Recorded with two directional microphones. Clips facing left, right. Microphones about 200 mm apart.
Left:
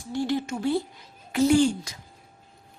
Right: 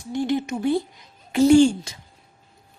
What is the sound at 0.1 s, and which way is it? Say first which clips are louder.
A woman's voice: right 3 dB; 20° right (ahead or behind).